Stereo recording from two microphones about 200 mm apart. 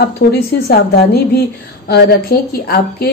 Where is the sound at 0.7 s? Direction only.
50° left (ahead or behind).